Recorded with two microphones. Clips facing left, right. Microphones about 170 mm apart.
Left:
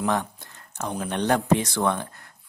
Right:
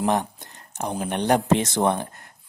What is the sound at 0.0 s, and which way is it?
A man's voice, 20° right (ahead or behind).